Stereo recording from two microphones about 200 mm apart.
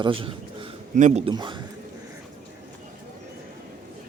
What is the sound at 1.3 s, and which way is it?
Speech, 25° right (ahead or behind).